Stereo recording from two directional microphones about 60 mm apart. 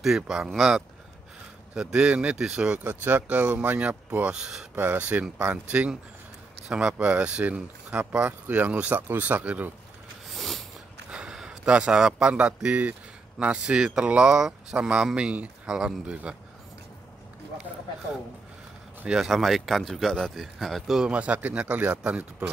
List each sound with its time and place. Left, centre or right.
0.0 s speech: centre
2.8 s speech: right
4.4 s speech: centre
4.7 s speech: right
10.3 s a sound: centre
11.1 s a man's voice: centre
15.6 s speech: centre
16.1 s speech: centre
19.0 s speech: centre
21.1 s speech: right